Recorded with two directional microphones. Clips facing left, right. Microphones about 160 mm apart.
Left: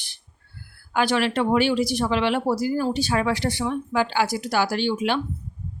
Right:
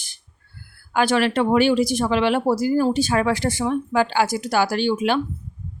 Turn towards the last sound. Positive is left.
turn(degrees=-50)  # may be behind; listen again after turning